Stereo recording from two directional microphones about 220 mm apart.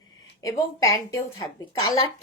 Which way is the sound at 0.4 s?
15° left (ahead or behind).